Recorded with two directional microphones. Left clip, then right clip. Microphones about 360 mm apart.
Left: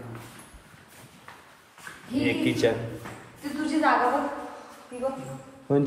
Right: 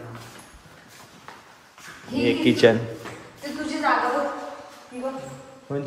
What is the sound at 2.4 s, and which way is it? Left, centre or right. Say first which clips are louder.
Speech: right 9 dB; right.